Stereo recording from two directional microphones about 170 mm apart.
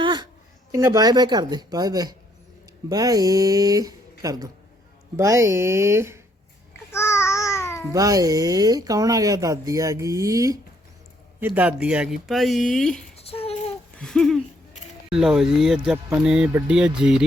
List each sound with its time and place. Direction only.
0.0 s a sound: 25° right (ahead or behind)
0.7 s speech: 20° right (ahead or behind)
6.9 s babbling: 15° left (ahead or behind)
7.9 s speech: 20° right (ahead or behind); by 13.0 s 5° left (ahead or behind)
13.1 s a sound: 35° left (ahead or behind)
14.0 s speech: 5° left (ahead or behind)